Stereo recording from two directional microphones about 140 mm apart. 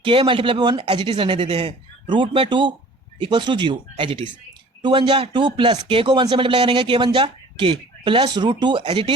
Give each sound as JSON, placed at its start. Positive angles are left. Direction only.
{"t": 0.0, "sound": "speech", "side_deg": -40}